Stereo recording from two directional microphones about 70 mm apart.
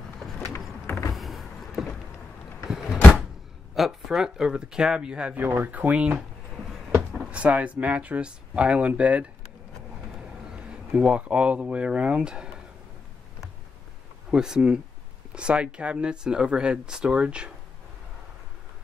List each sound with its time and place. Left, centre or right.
0.8 s power windows: left
1.1 s vehicle: centre
2.6 s door: centre
3.7 s speech: centre
5.4 s speech: right
7.2 s speech: centre
10.9 s speech: centre
14.3 s speech: centre